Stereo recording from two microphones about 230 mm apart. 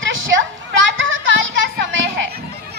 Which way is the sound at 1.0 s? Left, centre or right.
Right.